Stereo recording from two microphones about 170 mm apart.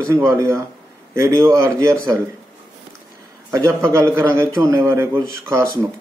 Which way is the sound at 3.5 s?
15° right (ahead or behind).